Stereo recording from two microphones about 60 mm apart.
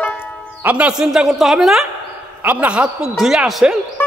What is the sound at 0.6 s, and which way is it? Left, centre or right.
Speech, right.